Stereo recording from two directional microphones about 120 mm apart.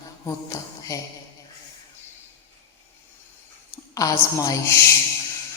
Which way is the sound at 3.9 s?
30° left (ahead or behind).